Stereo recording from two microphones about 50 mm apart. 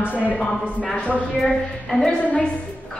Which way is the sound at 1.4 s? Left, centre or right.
Centre.